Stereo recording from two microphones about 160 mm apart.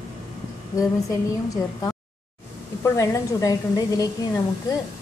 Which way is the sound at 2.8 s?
20° left (ahead or behind).